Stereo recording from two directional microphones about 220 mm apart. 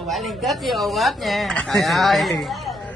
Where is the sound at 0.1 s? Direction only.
Centre (ahead or behind).